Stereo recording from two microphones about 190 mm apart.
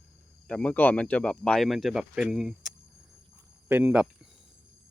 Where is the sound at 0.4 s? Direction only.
5° left (ahead or behind).